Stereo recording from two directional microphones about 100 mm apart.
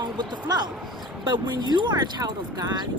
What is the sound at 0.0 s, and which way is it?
Speech, 45° right (ahead or behind).